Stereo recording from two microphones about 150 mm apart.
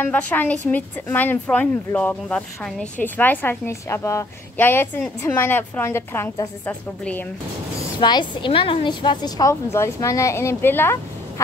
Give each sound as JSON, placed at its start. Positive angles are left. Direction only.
{"t": 0.0, "sound": "speech", "side_deg": 10}
{"t": 8.0, "sound": "a woman's voice", "side_deg": 30}